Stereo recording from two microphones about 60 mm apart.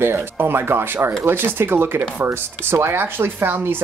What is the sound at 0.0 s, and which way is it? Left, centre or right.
Speech, right.